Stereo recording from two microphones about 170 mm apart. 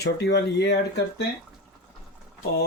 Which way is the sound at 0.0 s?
80° left.